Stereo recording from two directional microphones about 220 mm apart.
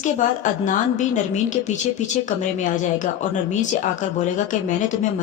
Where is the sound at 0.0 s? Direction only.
35° left (ahead or behind).